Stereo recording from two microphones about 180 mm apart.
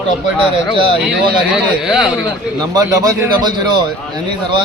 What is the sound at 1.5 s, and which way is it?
Speech, centre (ahead or behind).